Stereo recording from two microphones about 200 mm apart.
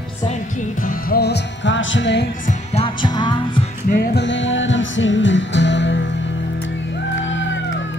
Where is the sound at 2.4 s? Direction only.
35° left (ahead or behind).